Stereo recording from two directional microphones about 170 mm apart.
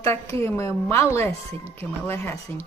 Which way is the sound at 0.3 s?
15° left (ahead or behind).